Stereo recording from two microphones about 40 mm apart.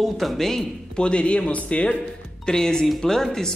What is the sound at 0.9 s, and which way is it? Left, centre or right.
Speech, left.